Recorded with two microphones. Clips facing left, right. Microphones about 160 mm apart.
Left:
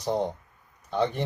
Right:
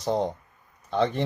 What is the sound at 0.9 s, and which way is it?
Speech, 15° left (ahead or behind).